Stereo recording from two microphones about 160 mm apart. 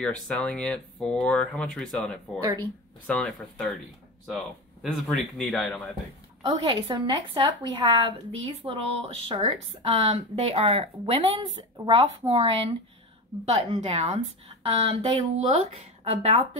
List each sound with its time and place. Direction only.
0.0 s speech: 5° left (ahead or behind)
4.8 s speech: 5° left (ahead or behind)
6.4 s speech: 30° right (ahead or behind)